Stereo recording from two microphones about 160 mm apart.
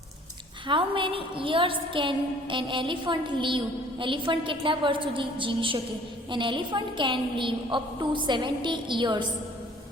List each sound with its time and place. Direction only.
0.7 s a woman's voice: 35° right (ahead or behind)